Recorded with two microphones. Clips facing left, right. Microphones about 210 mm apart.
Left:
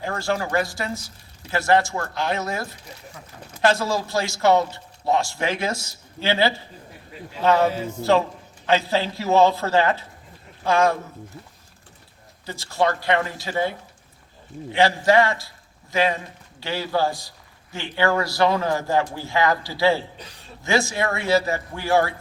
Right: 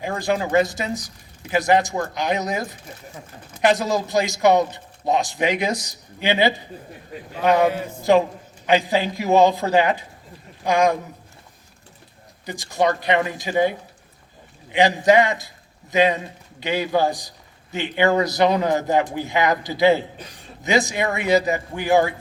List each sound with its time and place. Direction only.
0.0 s a man's voice: 15° right (ahead or behind)
12.5 s a man's voice: 15° right (ahead or behind)